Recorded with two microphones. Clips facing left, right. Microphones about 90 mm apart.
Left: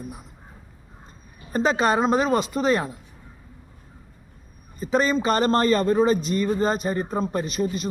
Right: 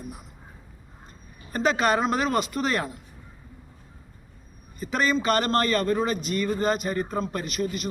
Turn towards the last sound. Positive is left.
turn(degrees=30)  # may be behind; listen again after turning